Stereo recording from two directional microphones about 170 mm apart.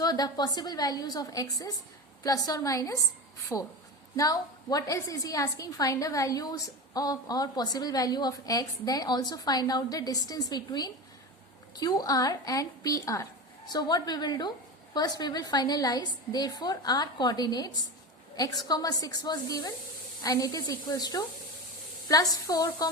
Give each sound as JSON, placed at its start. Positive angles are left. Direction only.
{"t": 0.0, "sound": "a woman's voice", "side_deg": 25}